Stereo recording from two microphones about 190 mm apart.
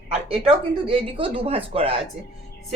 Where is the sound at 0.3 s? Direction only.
30° right (ahead or behind).